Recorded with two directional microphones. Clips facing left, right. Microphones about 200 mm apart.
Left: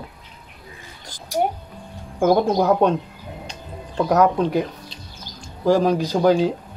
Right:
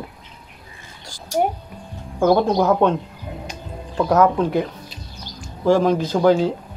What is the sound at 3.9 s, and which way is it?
Speech, 20° left (ahead or behind).